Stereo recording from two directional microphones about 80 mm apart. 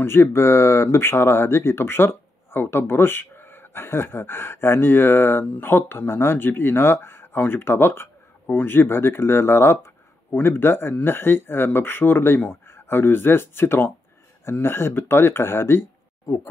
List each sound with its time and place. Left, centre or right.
0.2 s speech: left
16.3 s speech: left